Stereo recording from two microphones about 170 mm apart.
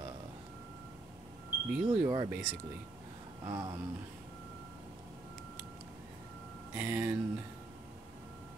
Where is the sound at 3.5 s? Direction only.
20° right (ahead or behind).